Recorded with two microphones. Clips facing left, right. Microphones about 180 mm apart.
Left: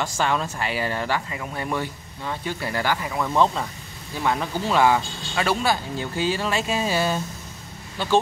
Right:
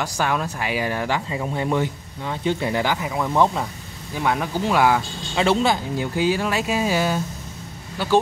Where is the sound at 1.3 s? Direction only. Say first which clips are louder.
Right 5 dB; 25° right (ahead or behind).